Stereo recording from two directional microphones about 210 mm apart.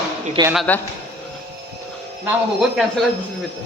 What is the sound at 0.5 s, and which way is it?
Speech, 5° left (ahead or behind).